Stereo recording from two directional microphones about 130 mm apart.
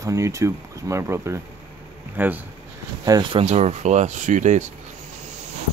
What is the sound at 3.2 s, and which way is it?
Speech, 50° right (ahead or behind).